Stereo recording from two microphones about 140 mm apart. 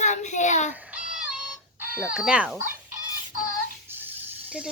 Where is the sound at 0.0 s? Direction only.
60° left (ahead or behind).